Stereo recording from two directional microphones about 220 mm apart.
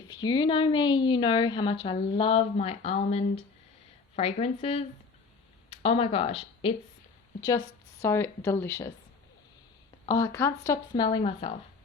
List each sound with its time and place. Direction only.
0.1 s a woman's voice: 20° left (ahead or behind)
8.0 s speech: 10° left (ahead or behind)
10.1 s speech: 15° left (ahead or behind)